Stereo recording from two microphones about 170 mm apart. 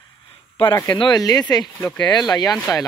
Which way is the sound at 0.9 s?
25° left (ahead or behind).